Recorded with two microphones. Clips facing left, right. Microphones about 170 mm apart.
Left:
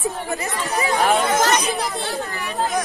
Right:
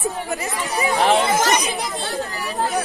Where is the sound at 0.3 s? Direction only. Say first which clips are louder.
Even; 15° right (ahead or behind).